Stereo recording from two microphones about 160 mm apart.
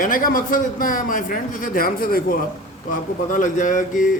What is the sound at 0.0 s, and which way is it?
Speech, 60° left (ahead or behind).